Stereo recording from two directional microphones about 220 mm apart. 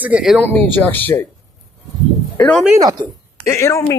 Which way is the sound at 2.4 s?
5° left (ahead or behind).